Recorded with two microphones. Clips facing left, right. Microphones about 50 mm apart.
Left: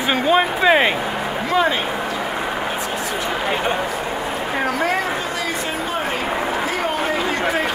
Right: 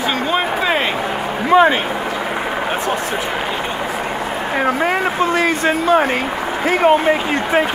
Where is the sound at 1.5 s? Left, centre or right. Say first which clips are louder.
Right 7 dB; right.